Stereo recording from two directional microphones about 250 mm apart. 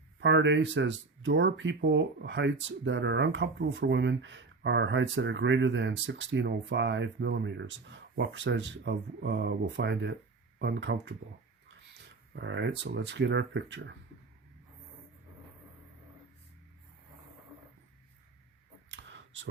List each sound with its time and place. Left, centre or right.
0.2 s speech: right
12.4 s speech: right
18.9 s a sound: right